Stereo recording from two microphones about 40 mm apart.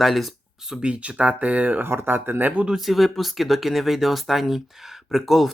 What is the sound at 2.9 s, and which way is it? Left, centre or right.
Speech, centre.